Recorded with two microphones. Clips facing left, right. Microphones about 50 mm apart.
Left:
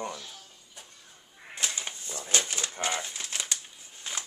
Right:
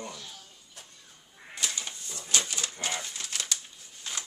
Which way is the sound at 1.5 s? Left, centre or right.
Left.